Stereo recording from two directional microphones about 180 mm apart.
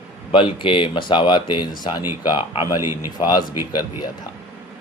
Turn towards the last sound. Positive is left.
turn(degrees=25)  # may be behind; listen again after turning